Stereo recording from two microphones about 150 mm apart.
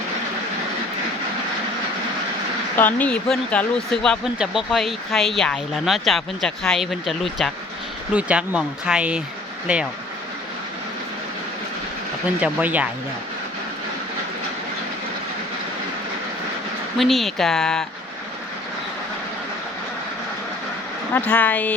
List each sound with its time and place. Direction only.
2.7 s speech: 10° left (ahead or behind); by 9.8 s 5° right (ahead or behind)
12.4 s speech: 10° right (ahead or behind)
17.0 s speech: centre (ahead or behind)
21.1 s speech: 10° left (ahead or behind)